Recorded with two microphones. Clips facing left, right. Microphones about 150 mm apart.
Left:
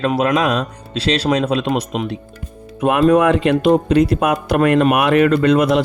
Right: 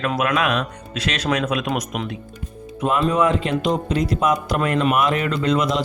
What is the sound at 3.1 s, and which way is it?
Speech, 65° left (ahead or behind).